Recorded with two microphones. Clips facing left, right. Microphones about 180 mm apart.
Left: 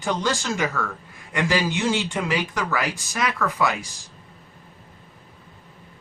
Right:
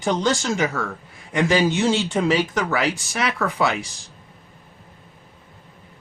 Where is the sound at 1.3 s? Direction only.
25° right (ahead or behind).